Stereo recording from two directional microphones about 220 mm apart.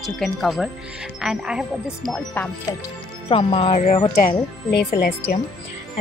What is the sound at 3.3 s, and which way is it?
Speech, 25° left (ahead or behind).